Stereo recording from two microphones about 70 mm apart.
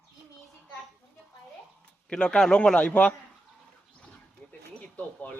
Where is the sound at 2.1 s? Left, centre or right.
Centre.